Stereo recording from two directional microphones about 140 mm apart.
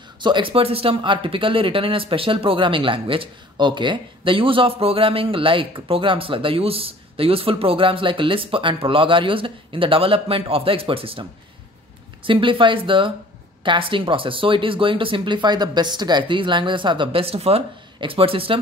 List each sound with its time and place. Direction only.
0.2 s speech: 35° right (ahead or behind)
12.3 s speech: 35° right (ahead or behind)